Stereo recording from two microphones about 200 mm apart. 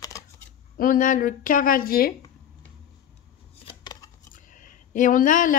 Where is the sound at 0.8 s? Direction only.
40° left (ahead or behind).